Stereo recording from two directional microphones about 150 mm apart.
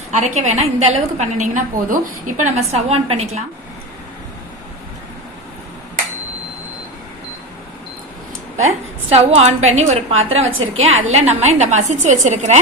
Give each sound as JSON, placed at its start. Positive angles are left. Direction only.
{"t": 0.1, "sound": "a woman's voice", "side_deg": -50}
{"t": 9.1, "sound": "a woman's voice", "side_deg": -45}